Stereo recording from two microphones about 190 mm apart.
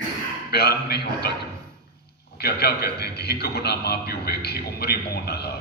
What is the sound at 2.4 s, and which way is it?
A man's voice, 55° left (ahead or behind).